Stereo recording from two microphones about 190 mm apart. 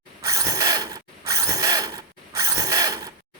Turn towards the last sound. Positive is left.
turn(degrees=-20)  # may be behind; listen again after turning